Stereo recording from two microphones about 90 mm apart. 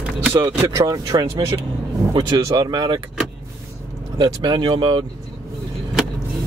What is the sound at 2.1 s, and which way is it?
Speech, 55° right (ahead or behind).